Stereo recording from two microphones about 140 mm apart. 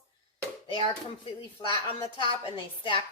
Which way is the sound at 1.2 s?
35° left (ahead or behind).